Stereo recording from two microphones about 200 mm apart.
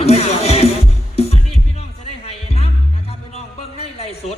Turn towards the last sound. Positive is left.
turn(degrees=30)  # may be behind; listen again after turning